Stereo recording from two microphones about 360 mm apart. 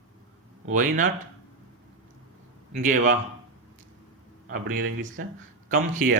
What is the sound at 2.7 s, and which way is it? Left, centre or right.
Speech, right.